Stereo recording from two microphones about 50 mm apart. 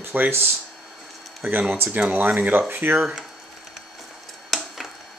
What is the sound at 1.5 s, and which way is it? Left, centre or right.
Speech, right.